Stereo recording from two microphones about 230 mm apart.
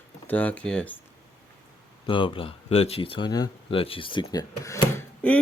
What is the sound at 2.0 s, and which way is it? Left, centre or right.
Speech, left.